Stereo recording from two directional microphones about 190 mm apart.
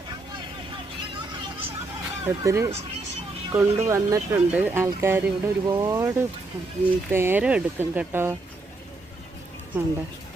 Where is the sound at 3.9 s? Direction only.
15° right (ahead or behind).